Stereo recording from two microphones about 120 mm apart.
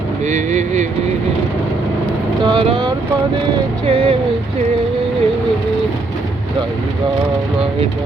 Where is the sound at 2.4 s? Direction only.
45° right (ahead or behind).